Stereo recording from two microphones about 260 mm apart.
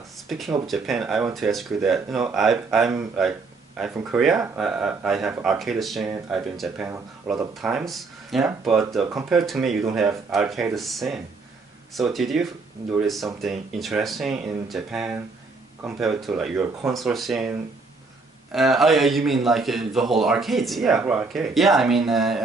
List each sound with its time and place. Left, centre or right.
0.3 s speech: centre